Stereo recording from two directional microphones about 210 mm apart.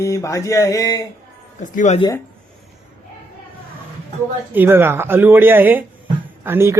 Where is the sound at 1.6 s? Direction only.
35° left (ahead or behind).